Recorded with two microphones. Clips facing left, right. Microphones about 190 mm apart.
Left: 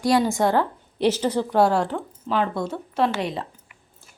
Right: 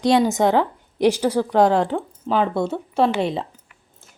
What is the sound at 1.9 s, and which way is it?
Speech, 25° right (ahead or behind).